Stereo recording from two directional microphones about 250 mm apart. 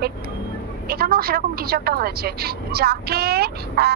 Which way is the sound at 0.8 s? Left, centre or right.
Right.